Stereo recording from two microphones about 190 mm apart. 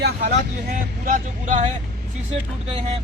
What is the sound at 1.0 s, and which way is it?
Speech, 45° right (ahead or behind).